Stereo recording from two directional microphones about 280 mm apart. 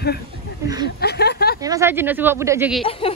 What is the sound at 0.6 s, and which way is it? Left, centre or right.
Speech, centre.